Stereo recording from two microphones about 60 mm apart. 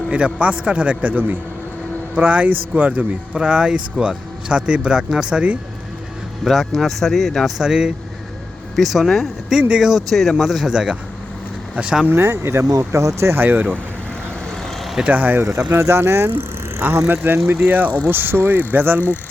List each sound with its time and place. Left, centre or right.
0.1 s a man's voice: centre
6.4 s speech: centre
7.6 s speech: centre
8.7 s speech: centre
9.6 s a man's voice: centre
10.1 s speech: centre
12.1 s speech: right
13.4 s speech: right
15.0 s a man's voice: right
15.8 s speech: right